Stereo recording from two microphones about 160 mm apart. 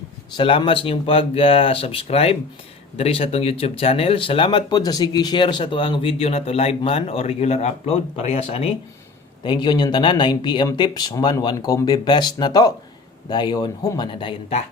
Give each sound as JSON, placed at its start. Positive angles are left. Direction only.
{"t": 0.3, "sound": "speech", "side_deg": 30}